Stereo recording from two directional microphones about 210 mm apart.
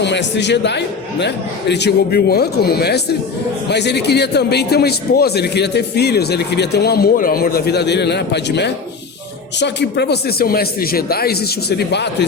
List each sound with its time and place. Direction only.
0.0 s a man's voice: 55° left (ahead or behind)